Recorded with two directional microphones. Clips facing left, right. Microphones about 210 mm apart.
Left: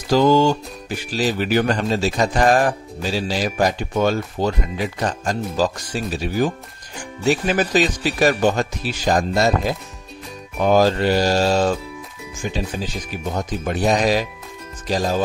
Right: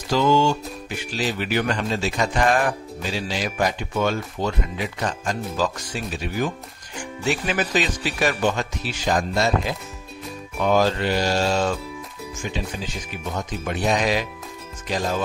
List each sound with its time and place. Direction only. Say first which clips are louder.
0.1 s speech: left 4 dB; 40° left (ahead or behind)